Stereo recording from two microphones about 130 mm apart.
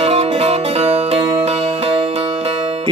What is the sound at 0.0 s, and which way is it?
Music, 55° right (ahead or behind).